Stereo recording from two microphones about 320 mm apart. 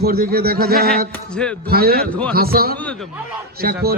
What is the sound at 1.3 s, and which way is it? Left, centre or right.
Speech, centre.